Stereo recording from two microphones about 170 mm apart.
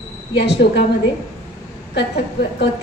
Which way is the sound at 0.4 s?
90° left.